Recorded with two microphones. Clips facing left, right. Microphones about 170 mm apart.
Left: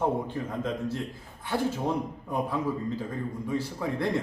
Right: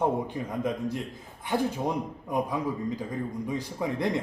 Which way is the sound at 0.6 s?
15° right (ahead or behind).